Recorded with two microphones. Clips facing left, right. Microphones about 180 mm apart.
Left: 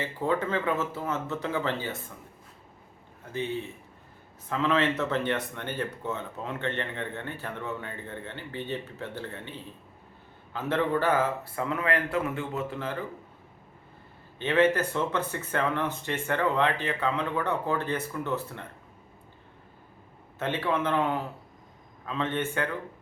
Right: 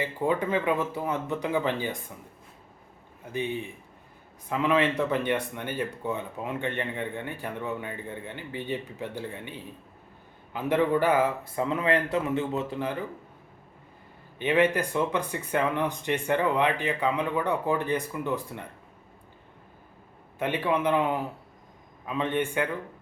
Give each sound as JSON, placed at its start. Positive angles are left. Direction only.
{"t": 0.0, "sound": "speech", "side_deg": -15}
{"t": 3.3, "sound": "speech", "side_deg": -15}
{"t": 14.3, "sound": "speech", "side_deg": -15}
{"t": 20.4, "sound": "speech", "side_deg": -15}